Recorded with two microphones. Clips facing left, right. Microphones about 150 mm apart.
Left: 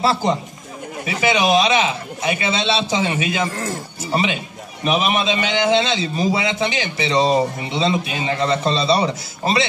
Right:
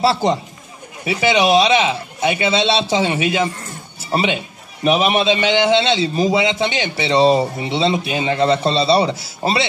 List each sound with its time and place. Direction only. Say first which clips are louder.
0.0 s a man's voice: right 2 dB; 30° right (ahead or behind)
3.5 s a sound: left 8 dB; 90° left
4.1 s a man's voice: right 2 dB; 30° right (ahead or behind)